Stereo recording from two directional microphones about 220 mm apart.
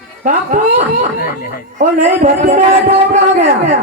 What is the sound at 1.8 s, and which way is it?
A man's voice, 35° right (ahead or behind).